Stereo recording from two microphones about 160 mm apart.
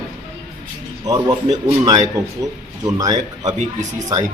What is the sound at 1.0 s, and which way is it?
A man's voice, 25° right (ahead or behind).